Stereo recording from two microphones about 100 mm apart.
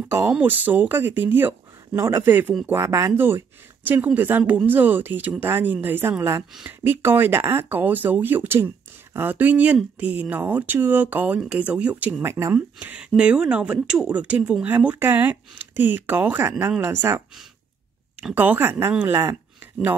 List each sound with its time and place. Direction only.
0.3 s speech: 15° right (ahead or behind)
12.5 s speech: 15° right (ahead or behind)
18.3 s speech: 15° right (ahead or behind)